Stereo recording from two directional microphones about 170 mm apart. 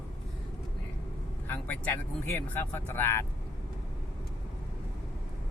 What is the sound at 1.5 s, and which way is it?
Speech, 10° left (ahead or behind).